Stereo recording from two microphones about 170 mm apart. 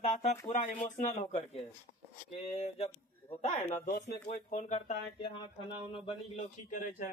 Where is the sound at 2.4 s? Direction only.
35° left (ahead or behind).